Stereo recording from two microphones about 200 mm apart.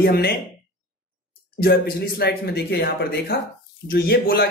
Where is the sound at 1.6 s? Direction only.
50° left (ahead or behind).